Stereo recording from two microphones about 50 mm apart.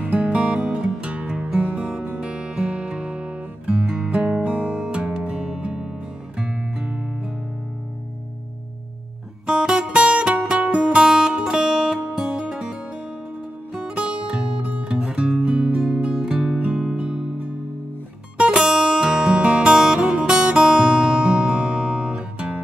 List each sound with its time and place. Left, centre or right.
0.0 s music: right
9.5 s music: centre
13.9 s music: right
18.6 s music: centre